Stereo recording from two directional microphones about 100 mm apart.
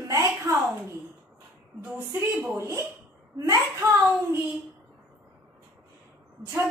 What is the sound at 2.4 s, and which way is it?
A woman's voice, 30° right (ahead or behind).